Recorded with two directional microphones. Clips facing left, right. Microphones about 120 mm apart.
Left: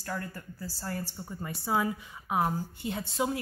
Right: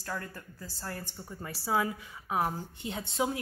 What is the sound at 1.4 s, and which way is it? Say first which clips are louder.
A woman's voice: left 1 dB; 20° left (ahead or behind).